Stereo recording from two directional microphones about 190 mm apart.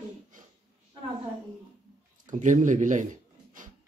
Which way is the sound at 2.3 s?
40° right (ahead or behind).